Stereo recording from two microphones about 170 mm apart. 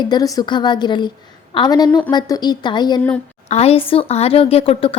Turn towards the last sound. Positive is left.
turn(degrees=35)  # may be behind; listen again after turning